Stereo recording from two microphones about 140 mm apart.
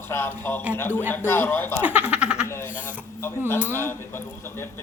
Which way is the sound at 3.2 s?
15° left (ahead or behind).